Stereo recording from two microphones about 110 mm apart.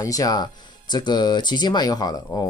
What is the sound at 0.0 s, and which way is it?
Speech, 30° left (ahead or behind).